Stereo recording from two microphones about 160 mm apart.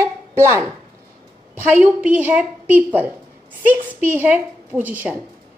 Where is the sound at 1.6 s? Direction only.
10° right (ahead or behind).